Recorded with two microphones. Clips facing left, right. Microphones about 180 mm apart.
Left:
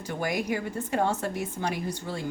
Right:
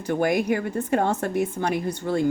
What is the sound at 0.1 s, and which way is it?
Speech, 55° right (ahead or behind).